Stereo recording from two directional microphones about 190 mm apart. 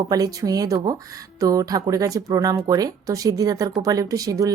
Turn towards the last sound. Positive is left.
turn(degrees=-20)  # may be behind; listen again after turning